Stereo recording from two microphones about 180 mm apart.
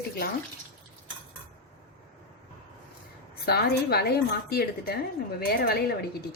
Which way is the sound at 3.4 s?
60° left (ahead or behind).